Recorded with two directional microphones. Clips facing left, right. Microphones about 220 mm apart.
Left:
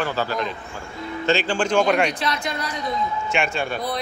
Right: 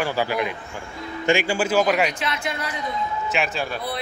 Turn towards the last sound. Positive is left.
turn(degrees=0)  # may be behind; listen again after turning